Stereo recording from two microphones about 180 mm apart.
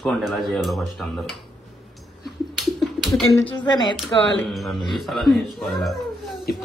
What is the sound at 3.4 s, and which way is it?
Speech, 25° left (ahead or behind).